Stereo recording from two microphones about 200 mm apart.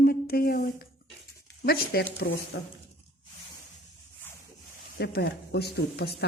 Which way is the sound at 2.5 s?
70° left (ahead or behind).